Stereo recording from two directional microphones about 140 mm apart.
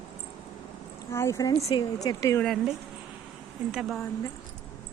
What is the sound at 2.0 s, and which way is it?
Speech, 25° left (ahead or behind).